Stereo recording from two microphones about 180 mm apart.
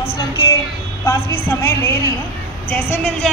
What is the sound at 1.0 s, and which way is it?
Speech, 15° left (ahead or behind).